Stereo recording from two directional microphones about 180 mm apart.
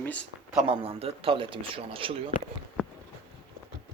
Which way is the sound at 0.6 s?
30° right (ahead or behind).